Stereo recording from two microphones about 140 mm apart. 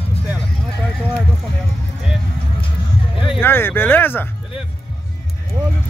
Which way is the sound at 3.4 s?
15° left (ahead or behind).